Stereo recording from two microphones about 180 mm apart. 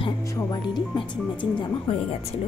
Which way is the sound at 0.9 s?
25° left (ahead or behind).